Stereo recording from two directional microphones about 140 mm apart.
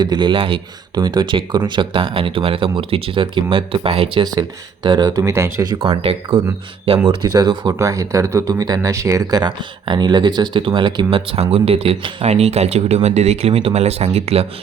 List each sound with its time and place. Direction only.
0.0 s speech: 30° right (ahead or behind)